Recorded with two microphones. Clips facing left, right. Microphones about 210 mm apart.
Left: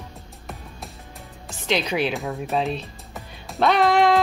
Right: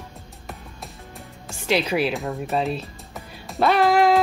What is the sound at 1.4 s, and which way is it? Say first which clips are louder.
Music: right 2 dB; 5° right (ahead or behind).